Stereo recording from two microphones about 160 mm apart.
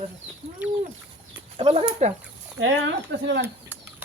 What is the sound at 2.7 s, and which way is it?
Speech, 90° right.